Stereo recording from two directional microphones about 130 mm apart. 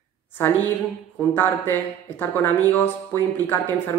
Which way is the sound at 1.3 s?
15° left (ahead or behind).